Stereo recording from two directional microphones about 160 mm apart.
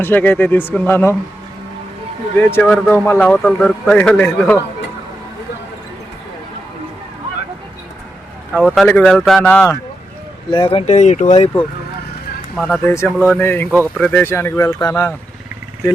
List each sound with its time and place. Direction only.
0.0 s a man's voice: 10° left (ahead or behind)
2.4 s a man's voice: 10° left (ahead or behind)
8.5 s speech: 5° left (ahead or behind)
10.5 s speech: 35° left (ahead or behind)
12.5 s speech: 5° left (ahead or behind)
12.8 s a man's voice: 15° left (ahead or behind)